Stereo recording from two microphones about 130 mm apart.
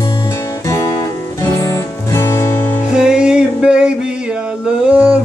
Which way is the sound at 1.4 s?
25° left (ahead or behind).